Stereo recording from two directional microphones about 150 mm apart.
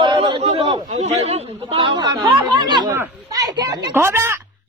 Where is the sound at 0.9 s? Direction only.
50° right (ahead or behind); by 2.9 s 30° right (ahead or behind).